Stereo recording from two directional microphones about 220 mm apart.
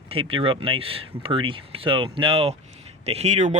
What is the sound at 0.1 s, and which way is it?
Speech, 25° right (ahead or behind).